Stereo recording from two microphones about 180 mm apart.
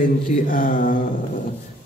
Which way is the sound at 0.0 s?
50° left (ahead or behind).